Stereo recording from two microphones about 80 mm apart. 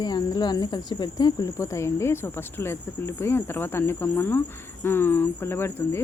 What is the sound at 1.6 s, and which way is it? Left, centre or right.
Speech, left.